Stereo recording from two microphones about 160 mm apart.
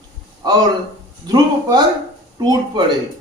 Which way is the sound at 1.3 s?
25° right (ahead or behind).